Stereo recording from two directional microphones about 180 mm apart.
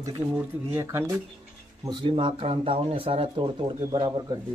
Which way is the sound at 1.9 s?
25° right (ahead or behind).